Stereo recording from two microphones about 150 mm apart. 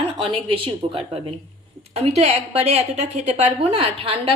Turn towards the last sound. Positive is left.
turn(degrees=-40)  # may be behind; listen again after turning